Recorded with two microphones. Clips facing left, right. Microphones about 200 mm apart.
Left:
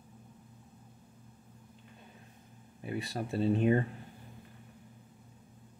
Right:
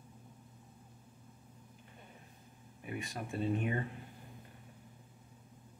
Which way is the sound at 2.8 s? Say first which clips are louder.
Left 5 dB; 35° left (ahead or behind).